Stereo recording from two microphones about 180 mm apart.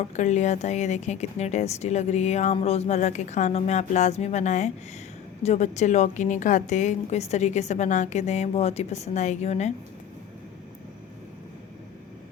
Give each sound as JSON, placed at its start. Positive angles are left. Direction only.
{"t": 0.0, "sound": "speech", "side_deg": 40}